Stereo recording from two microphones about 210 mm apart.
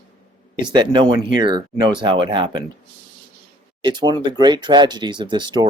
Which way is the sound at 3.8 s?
20° right (ahead or behind).